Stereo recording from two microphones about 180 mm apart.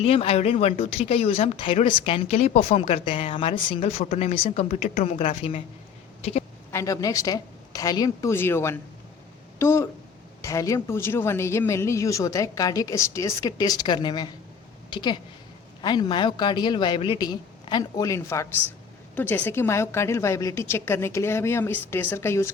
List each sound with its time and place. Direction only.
0.0 s speech: 35° left (ahead or behind)
6.7 s a woman's voice: 15° left (ahead or behind)